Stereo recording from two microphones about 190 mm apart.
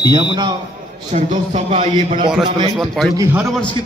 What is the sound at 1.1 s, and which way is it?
A man's voice, 40° right (ahead or behind).